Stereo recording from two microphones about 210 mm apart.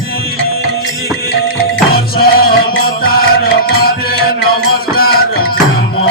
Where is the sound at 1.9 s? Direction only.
45° left (ahead or behind).